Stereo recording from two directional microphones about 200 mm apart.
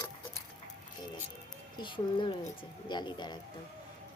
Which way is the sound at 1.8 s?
25° left (ahead or behind).